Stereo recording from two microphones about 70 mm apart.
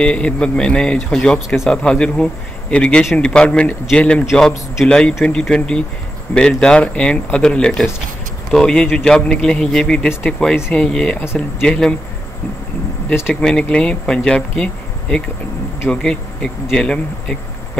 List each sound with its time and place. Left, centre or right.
0.0 s speech: centre
13.3 s speech: centre